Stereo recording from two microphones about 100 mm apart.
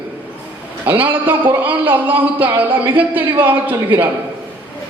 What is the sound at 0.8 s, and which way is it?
A man's voice, 20° right (ahead or behind).